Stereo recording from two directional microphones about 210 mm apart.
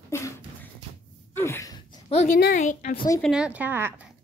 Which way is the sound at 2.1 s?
30° left (ahead or behind).